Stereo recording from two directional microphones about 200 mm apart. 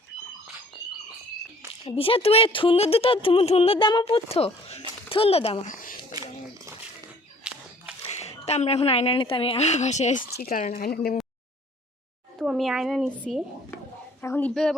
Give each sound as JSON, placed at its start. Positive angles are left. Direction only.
{"t": 1.8, "sound": "speech", "side_deg": 25}
{"t": 5.7, "sound": "a sound", "side_deg": 45}
{"t": 7.4, "sound": "a sound", "side_deg": -5}
{"t": 8.1, "sound": "a woman's voice", "side_deg": 30}
{"t": 10.3, "sound": "speech", "side_deg": 45}
{"t": 12.4, "sound": "a woman's voice", "side_deg": 0}